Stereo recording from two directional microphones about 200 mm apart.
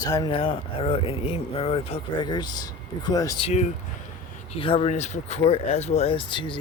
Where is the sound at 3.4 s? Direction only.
35° left (ahead or behind).